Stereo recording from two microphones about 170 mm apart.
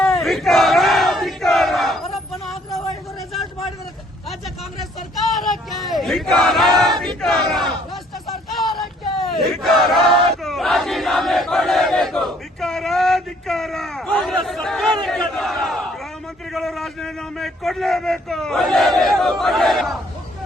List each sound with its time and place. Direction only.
0.2 s battle cry: centre (ahead or behind)
2.1 s vehicle: centre (ahead or behind)
4.3 s a sound: centre (ahead or behind)
9.4 s battle cry: centre (ahead or behind)
16.5 s a man's voice: centre (ahead or behind)